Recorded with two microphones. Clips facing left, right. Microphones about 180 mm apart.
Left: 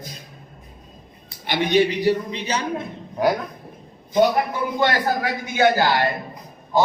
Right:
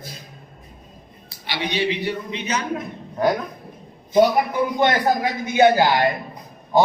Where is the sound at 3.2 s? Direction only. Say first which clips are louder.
Even; 5° left (ahead or behind).